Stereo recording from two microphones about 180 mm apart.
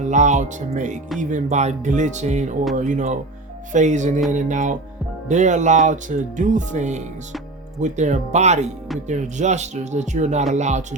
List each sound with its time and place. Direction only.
0.0 s speech: 40° right (ahead or behind)